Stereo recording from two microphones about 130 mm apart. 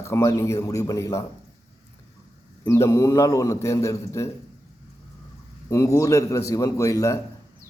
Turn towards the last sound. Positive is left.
turn(degrees=25)  # may be behind; listen again after turning